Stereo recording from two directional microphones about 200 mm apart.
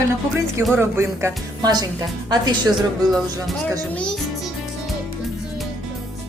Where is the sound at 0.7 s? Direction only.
15° right (ahead or behind).